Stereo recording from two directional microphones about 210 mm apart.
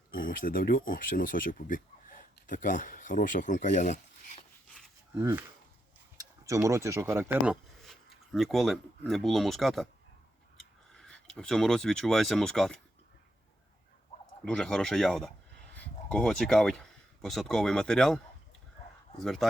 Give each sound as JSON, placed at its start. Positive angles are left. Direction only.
{"t": 0.1, "sound": "speech", "side_deg": 45}
{"t": 5.1, "sound": "speech", "side_deg": -10}
{"t": 14.4, "sound": "speech", "side_deg": 5}
{"t": 19.2, "sound": "speech", "side_deg": 0}